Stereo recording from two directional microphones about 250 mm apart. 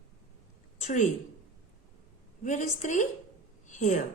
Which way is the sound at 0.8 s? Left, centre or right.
Left.